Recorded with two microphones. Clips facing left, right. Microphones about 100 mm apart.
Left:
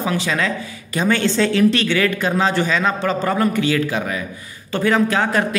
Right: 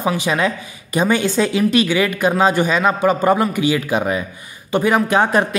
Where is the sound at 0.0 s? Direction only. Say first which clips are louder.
Right 3 dB; 15° right (ahead or behind).